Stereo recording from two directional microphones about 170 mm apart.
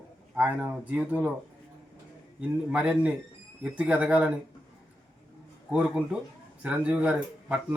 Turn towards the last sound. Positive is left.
turn(degrees=-5)  # may be behind; listen again after turning